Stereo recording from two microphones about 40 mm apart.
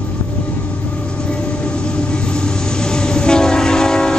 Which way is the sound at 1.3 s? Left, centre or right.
Left.